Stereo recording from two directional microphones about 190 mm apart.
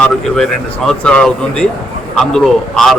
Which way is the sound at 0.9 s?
5° left (ahead or behind).